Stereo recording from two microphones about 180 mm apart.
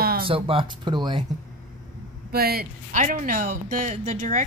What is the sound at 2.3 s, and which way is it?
Speech, 60° right (ahead or behind).